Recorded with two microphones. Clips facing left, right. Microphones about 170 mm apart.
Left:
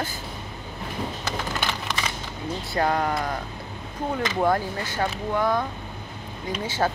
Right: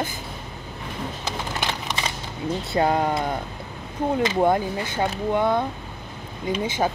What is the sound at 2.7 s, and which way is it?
Speech, 25° right (ahead or behind).